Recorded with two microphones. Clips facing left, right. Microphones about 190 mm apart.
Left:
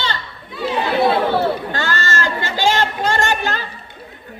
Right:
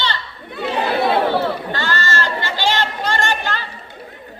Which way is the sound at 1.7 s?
45° left (ahead or behind).